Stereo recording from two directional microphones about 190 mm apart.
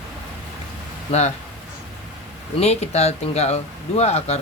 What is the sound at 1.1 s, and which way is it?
Speech, 35° left (ahead or behind).